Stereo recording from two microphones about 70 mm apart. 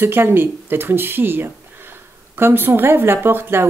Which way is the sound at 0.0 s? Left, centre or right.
Right.